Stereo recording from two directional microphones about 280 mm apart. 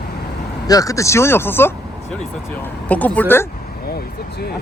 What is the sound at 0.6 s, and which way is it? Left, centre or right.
Speech, centre.